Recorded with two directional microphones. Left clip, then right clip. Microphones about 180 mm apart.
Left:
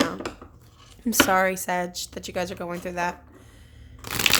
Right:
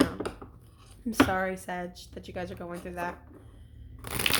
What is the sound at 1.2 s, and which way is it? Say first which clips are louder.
Speech: left 9 dB; 35° left (ahead or behind).